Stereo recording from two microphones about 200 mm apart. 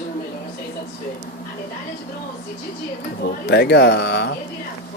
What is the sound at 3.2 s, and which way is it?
Speech, 55° left (ahead or behind).